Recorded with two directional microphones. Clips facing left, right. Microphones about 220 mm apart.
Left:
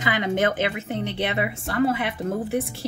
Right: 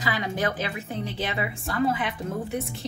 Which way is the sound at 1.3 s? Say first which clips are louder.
Left 4 dB; 25° left (ahead or behind).